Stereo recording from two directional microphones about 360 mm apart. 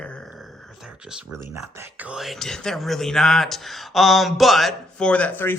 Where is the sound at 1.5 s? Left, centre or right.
Centre.